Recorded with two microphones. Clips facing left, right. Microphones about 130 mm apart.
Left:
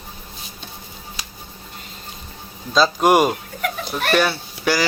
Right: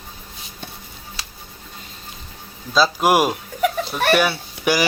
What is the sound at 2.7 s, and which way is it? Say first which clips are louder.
Speech: left 1 dB; 5° right (ahead or behind).